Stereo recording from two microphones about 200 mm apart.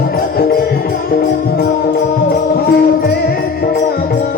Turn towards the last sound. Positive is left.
turn(degrees=50)  # may be behind; listen again after turning